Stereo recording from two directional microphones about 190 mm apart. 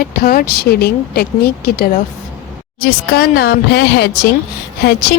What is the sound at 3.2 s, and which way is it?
Speech, 60° left (ahead or behind).